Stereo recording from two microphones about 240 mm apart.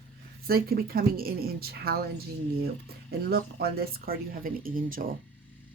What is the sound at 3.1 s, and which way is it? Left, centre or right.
Speech, right.